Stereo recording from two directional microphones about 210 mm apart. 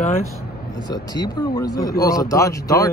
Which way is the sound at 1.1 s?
20° left (ahead or behind).